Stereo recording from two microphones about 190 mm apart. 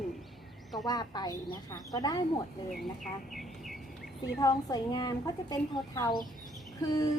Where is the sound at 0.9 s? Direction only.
20° left (ahead or behind).